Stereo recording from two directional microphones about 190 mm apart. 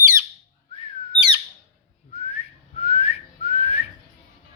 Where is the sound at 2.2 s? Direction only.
35° left (ahead or behind).